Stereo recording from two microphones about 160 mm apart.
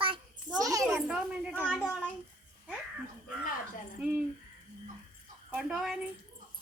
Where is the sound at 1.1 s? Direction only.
5° right (ahead or behind).